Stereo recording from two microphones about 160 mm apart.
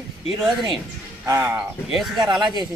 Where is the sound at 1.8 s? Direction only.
Centre (ahead or behind).